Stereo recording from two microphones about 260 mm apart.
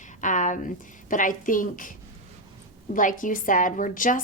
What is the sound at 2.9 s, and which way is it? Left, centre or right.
A woman's voice, left.